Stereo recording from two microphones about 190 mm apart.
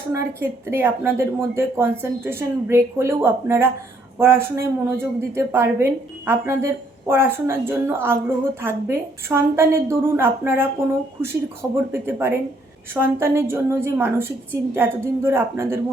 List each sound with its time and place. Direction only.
0.1 s a woman's voice: 15° right (ahead or behind)
11.9 s a woman's voice: 10° right (ahead or behind)